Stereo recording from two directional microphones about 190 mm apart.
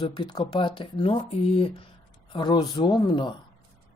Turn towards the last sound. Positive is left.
turn(degrees=25)  # may be behind; listen again after turning